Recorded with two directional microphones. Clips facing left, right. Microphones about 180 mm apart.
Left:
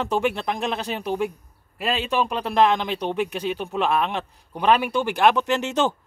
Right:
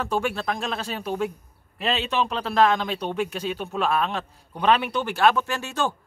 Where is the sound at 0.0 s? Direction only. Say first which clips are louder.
Left 2 dB; 20° left (ahead or behind).